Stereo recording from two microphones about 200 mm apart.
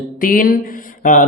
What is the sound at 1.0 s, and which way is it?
Speech, 40° left (ahead or behind).